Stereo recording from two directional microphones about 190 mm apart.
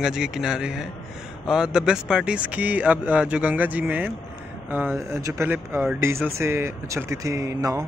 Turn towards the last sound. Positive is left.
turn(degrees=-15)  # may be behind; listen again after turning